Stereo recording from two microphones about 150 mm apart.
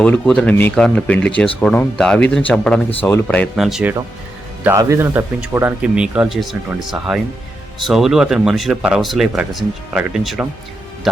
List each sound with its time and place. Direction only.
0.0 s speech: 10° left (ahead or behind)
3.5 s speech: centre (ahead or behind)
4.8 s speech: 20° right (ahead or behind)